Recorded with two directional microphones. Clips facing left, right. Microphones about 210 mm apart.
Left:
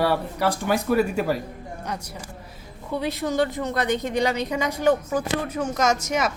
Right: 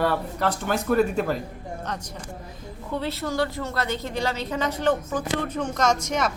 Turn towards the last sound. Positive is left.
turn(degrees=10)  # may be behind; listen again after turning